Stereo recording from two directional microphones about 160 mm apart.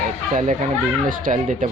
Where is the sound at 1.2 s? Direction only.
55° right (ahead or behind).